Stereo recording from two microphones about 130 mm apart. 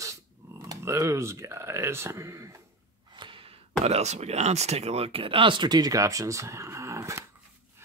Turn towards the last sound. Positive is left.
turn(degrees=-20)  # may be behind; listen again after turning